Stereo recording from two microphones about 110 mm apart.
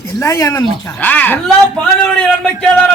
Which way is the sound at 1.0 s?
15° left (ahead or behind).